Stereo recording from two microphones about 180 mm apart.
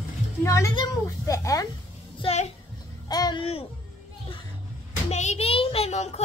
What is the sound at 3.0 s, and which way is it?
Babbling, 20° left (ahead or behind).